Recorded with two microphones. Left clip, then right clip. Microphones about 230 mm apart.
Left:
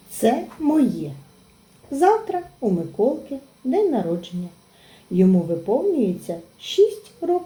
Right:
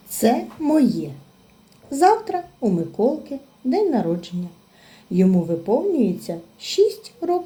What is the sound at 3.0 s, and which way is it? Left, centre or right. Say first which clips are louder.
Speech: even; right.